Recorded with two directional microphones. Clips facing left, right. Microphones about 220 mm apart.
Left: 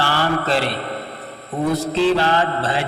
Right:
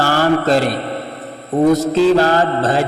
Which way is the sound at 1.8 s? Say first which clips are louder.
Right 5 dB; 40° right (ahead or behind).